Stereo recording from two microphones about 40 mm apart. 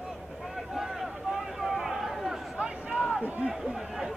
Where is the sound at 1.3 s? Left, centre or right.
Centre.